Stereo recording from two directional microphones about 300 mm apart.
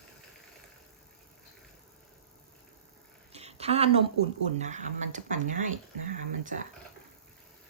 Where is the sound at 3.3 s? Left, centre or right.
Right.